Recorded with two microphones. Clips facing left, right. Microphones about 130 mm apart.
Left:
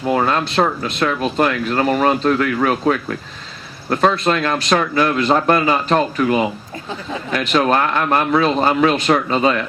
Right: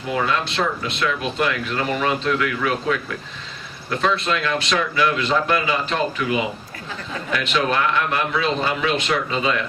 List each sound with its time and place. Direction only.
0.1 s speech: 45° left (ahead or behind)
7.3 s speech: 45° left (ahead or behind)